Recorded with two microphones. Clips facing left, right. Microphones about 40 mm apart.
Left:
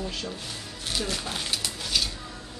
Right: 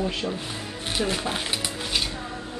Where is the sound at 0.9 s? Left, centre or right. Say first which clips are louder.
Right 5 dB; right.